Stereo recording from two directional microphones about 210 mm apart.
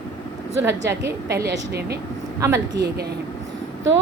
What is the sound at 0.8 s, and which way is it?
A woman's voice, 55° right (ahead or behind).